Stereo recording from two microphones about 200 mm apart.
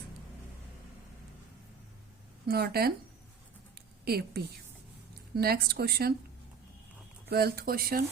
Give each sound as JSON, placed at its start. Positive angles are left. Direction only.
{"t": 2.5, "sound": "speech", "side_deg": -50}
{"t": 3.8, "sound": "a sound", "side_deg": -50}
{"t": 5.4, "sound": "speech", "side_deg": -50}
{"t": 7.3, "sound": "speech", "side_deg": -50}